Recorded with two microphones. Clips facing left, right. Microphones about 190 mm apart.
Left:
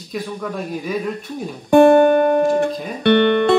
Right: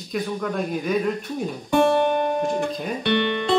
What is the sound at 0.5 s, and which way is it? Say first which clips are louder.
Speech: right 1 dB; centre (ahead or behind).